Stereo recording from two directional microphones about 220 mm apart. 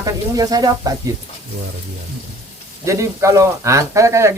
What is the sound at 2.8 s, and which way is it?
Speech, 15° right (ahead or behind).